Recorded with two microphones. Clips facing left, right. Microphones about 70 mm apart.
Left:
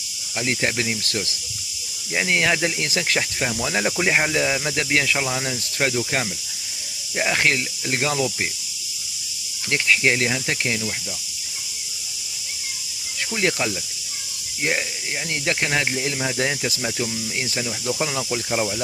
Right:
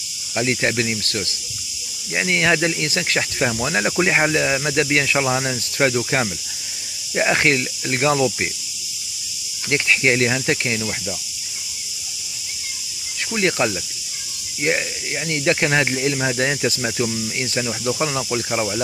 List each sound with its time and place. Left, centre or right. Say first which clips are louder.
0.5 s speech: right 2 dB; centre
2.1 s speech: right 1 dB; centre
2.4 s speech: right 3 dB; centre
5.4 s speech: right 4 dB; centre
9.7 s speech: right 2 dB; centre
13.4 s speech: right 3 dB; centre
15.4 s speech: right 5 dB; centre
17.6 s speech: right 3 dB; centre
18.0 s speech: right 3 dB; centre